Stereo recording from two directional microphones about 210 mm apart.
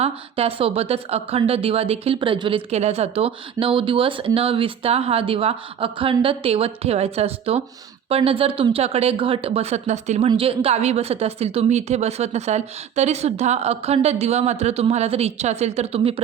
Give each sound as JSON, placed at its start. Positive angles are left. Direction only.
{"t": 0.0, "sound": "speech", "side_deg": -30}